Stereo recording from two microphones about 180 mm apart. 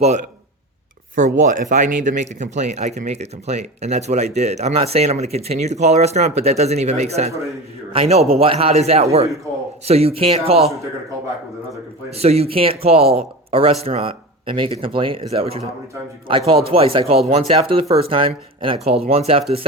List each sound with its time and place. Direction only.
1.1 s speech: 45° right (ahead or behind)
12.1 s speech: 35° right (ahead or behind)